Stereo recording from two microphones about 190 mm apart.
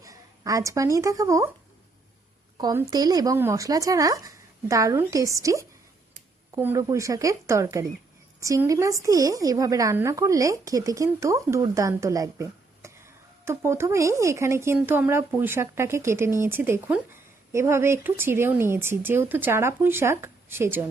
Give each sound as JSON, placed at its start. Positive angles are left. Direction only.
{"t": 0.0, "sound": "speech", "side_deg": -15}
{"t": 2.6, "sound": "a woman's voice", "side_deg": -20}